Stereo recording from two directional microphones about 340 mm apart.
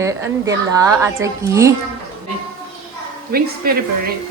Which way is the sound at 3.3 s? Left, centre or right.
Right.